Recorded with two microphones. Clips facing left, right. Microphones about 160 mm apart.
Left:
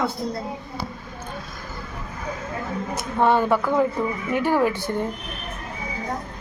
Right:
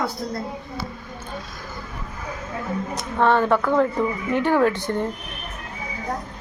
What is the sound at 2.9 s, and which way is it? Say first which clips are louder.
Speech: even; 10° left (ahead or behind).